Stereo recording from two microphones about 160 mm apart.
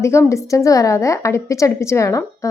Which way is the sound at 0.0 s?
15° left (ahead or behind).